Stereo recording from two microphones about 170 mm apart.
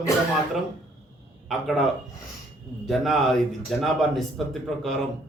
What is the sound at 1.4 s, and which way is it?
Speech, centre (ahead or behind).